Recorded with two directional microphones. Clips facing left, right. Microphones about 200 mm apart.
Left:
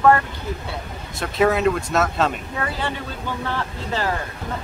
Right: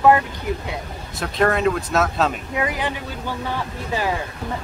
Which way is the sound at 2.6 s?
15° right (ahead or behind).